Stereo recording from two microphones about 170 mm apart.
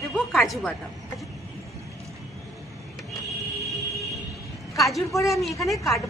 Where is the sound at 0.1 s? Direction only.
Centre (ahead or behind).